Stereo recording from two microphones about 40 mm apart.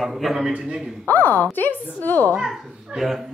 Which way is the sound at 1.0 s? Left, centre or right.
Left.